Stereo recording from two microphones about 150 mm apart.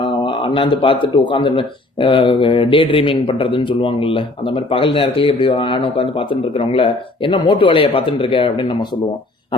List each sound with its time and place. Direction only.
0.0 s speech: 35° left (ahead or behind)